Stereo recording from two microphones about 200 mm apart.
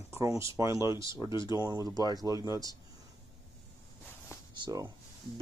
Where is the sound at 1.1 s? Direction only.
25° left (ahead or behind).